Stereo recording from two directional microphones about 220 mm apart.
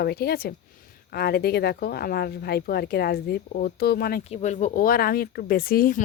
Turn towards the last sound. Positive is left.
turn(degrees=40)  # may be behind; listen again after turning